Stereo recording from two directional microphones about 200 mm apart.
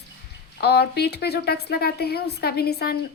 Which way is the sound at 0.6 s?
55° left (ahead or behind).